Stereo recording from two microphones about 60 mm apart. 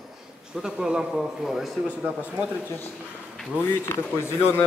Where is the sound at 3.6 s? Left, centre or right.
Left.